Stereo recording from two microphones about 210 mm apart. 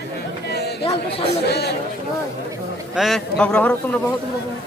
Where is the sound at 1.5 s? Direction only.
50° left (ahead or behind).